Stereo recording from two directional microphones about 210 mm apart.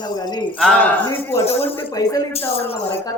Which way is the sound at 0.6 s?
5° left (ahead or behind).